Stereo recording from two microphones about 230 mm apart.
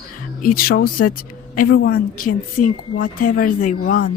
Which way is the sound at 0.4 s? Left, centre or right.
Left.